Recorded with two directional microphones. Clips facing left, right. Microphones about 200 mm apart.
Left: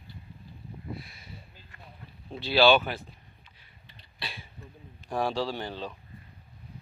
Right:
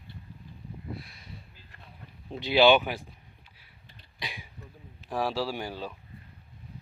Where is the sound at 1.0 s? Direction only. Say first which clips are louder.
Even; centre (ahead or behind).